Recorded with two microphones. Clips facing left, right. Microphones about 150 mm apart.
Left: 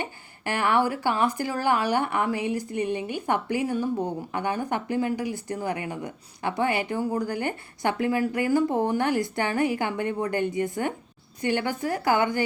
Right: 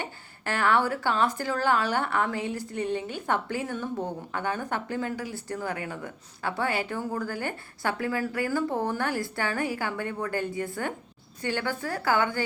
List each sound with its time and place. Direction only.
0.0 s speech: 15° left (ahead or behind)